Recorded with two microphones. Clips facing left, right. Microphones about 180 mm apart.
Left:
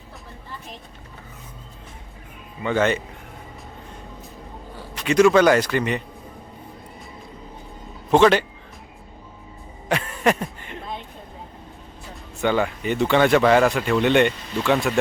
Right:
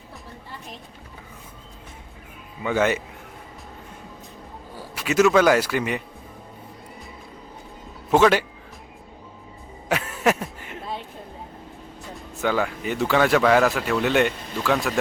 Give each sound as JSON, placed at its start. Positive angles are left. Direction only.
{"t": 2.6, "sound": "speech", "side_deg": -10}
{"t": 4.9, "sound": "speech", "side_deg": -5}
{"t": 8.1, "sound": "speech", "side_deg": -5}
{"t": 9.9, "sound": "a sound", "side_deg": -5}
{"t": 12.1, "sound": "speech", "side_deg": 0}